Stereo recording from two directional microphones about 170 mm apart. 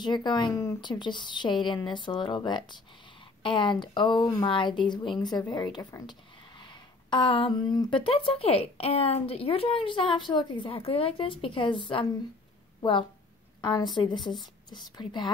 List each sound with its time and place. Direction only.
0.0 s speech: 25° left (ahead or behind)
13.6 s a woman's voice: 25° left (ahead or behind)
14.1 s a woman's voice: centre (ahead or behind)
15.0 s speech: 25° left (ahead or behind)